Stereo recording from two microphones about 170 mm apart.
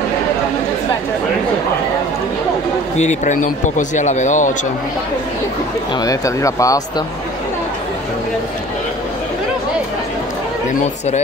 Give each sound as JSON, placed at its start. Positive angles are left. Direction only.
{"t": 3.0, "sound": "a man's voice", "side_deg": 45}
{"t": 5.9, "sound": "speech", "side_deg": 20}